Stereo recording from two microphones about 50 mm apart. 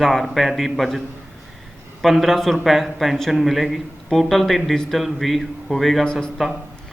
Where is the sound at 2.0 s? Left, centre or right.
Centre.